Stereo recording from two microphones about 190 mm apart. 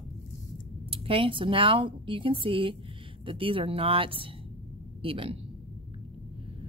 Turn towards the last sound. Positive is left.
turn(degrees=-30)  # may be behind; listen again after turning